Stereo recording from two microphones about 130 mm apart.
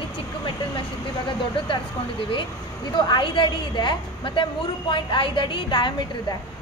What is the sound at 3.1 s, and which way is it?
A woman's voice, 35° left (ahead or behind).